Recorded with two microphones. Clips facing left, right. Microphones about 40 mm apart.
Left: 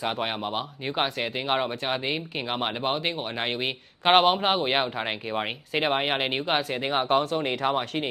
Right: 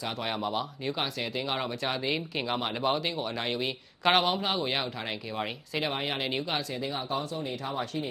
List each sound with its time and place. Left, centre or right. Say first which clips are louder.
0.0 s speech: left 4 dB; left